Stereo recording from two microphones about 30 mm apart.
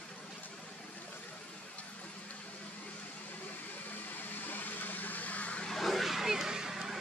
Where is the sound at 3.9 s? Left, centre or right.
Left.